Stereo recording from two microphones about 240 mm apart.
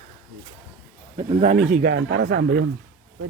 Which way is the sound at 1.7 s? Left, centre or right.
Right.